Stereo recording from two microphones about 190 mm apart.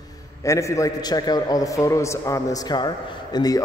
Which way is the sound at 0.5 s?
15° left (ahead or behind).